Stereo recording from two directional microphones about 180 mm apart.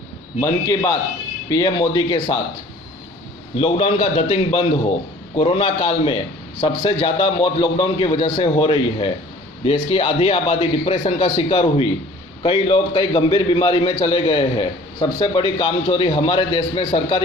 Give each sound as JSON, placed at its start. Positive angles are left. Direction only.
{"t": 0.3, "sound": "a man's voice", "side_deg": 15}
{"t": 3.6, "sound": "a man's voice", "side_deg": 30}